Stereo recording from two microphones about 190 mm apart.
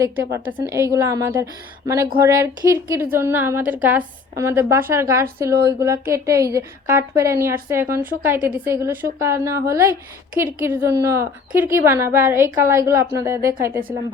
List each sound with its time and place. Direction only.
0.0 s a woman's voice: 15° right (ahead or behind)